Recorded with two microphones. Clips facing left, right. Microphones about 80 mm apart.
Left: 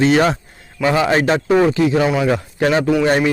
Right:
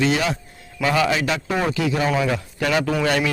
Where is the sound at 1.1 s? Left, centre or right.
Left.